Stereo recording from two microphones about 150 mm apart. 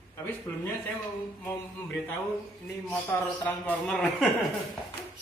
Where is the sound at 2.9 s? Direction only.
10° left (ahead or behind).